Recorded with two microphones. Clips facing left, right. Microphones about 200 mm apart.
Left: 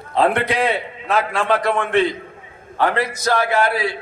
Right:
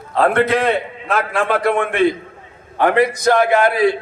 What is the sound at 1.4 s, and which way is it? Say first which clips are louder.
Speech: right 4 dB; 55° right (ahead or behind).